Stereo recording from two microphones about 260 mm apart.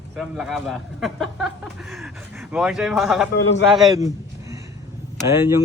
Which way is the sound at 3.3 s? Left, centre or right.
Left.